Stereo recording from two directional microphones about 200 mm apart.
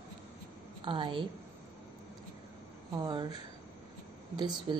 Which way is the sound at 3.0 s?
20° right (ahead or behind).